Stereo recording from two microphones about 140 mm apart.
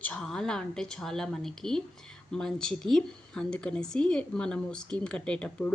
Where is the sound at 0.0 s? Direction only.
5° left (ahead or behind).